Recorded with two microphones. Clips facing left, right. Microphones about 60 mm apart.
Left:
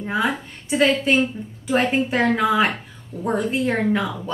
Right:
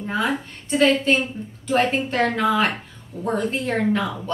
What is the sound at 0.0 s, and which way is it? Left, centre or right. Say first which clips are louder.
Speech: left 1 dB; centre.